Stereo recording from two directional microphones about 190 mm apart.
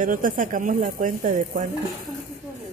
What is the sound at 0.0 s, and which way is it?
Speech, 45° right (ahead or behind).